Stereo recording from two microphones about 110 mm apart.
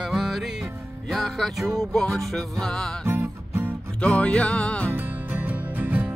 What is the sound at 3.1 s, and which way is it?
Music, 20° right (ahead or behind).